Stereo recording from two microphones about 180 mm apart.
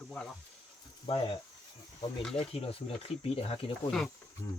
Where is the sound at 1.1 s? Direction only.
30° left (ahead or behind).